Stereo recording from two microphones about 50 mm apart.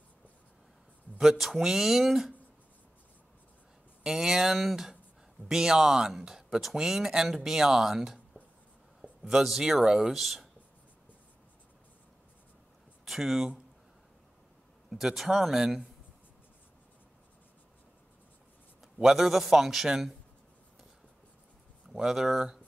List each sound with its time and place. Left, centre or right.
1.4 s speech: centre
4.0 s speech: centre
9.3 s speech: centre
13.0 s speech: centre
14.9 s speech: centre
19.0 s speech: centre
21.9 s speech: centre